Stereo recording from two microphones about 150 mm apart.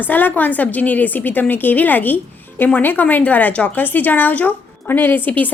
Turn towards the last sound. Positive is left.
turn(degrees=10)  # may be behind; listen again after turning